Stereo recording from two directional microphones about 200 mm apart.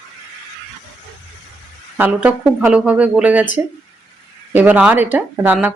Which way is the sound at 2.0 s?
5° right (ahead or behind).